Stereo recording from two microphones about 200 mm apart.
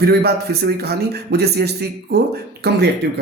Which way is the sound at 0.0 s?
50° right (ahead or behind).